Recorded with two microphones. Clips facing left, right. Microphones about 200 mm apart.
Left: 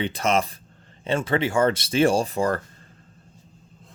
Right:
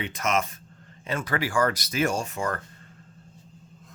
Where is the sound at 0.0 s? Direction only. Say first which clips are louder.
Left 4 dB; 30° left (ahead or behind).